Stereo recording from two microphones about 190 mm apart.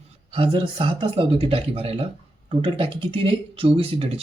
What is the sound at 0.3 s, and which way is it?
Speech, 30° right (ahead or behind).